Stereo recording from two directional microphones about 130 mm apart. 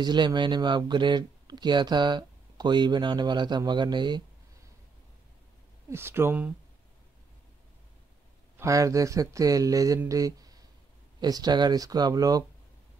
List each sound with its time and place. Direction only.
0.0 s speech: 35° right (ahead or behind)
5.9 s speech: 20° right (ahead or behind)
8.5 s speech: 25° right (ahead or behind)